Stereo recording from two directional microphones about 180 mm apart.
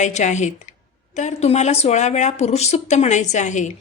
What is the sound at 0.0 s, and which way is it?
Speech, 40° left (ahead or behind).